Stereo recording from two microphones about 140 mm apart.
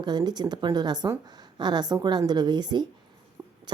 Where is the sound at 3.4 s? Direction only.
25° right (ahead or behind).